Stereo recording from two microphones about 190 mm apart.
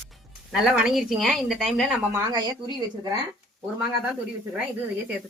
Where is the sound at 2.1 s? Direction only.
20° right (ahead or behind).